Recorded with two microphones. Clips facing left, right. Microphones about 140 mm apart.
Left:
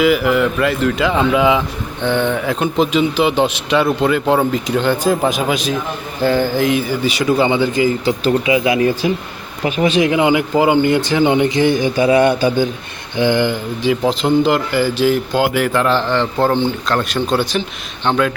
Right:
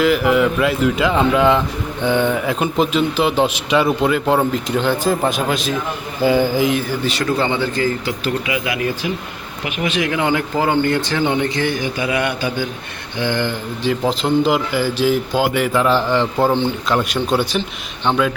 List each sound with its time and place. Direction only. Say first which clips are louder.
0.0 s speech: left 1 dB; centre (ahead or behind)
8.0 s speech: left 6 dB; 25° left (ahead or behind)
10.1 s speech: left 5 dB; 15° left (ahead or behind); by 12.6 s 30° left (ahead or behind)
13.1 s speech: left 5 dB; 15° left (ahead or behind)
13.8 s speech: left 3 dB; centre (ahead or behind)